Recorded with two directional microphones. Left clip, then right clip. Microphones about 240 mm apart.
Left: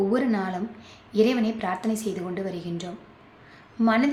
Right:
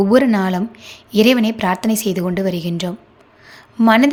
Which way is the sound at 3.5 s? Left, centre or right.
Right.